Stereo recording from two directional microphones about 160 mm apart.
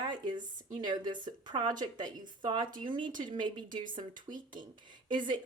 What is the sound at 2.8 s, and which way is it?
Speech, 30° right (ahead or behind).